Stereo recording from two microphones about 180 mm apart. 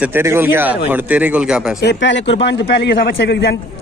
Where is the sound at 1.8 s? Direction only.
75° left (ahead or behind).